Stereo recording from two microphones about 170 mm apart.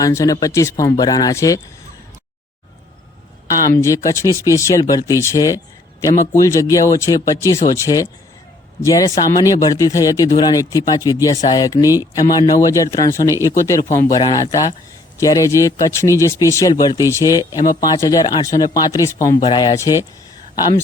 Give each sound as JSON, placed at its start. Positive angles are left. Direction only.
{"t": 0.0, "sound": "speech", "side_deg": 20}
{"t": 3.5, "sound": "speech", "side_deg": 20}